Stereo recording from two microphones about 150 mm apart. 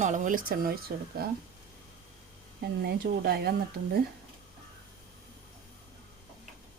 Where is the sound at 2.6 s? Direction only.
90° right.